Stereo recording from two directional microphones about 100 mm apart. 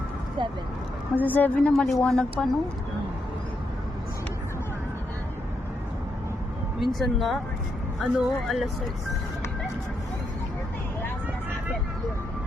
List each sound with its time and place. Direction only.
1.1 s a woman's voice: 20° left (ahead or behind)
1.7 s a woman's voice: 5° left (ahead or behind)
6.7 s a woman's voice: centre (ahead or behind)